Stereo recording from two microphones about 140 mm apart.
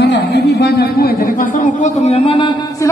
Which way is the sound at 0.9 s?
90° left.